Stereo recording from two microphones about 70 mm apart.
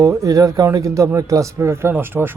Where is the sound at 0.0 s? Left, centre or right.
Right.